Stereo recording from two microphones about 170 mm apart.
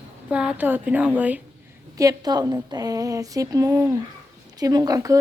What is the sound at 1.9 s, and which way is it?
A woman's voice, 20° right (ahead or behind).